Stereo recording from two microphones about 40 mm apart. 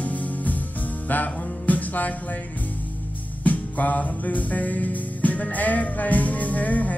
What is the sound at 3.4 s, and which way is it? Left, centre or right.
Music, left.